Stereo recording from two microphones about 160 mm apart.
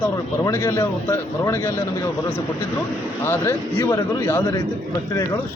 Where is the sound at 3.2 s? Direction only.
15° left (ahead or behind).